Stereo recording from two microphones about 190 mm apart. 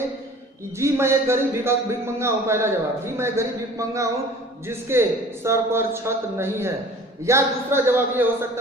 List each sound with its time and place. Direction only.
0.8 s a man's voice: 15° right (ahead or behind)